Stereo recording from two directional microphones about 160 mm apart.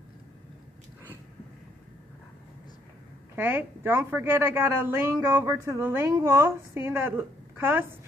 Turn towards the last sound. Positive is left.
turn(degrees=-15)  # may be behind; listen again after turning